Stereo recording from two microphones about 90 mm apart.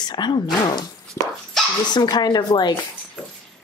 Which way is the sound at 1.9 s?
50° left (ahead or behind).